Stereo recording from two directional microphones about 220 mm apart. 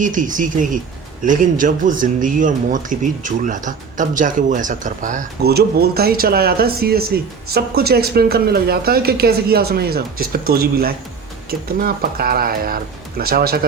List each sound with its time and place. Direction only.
0.0 s speech: 35° right (ahead or behind)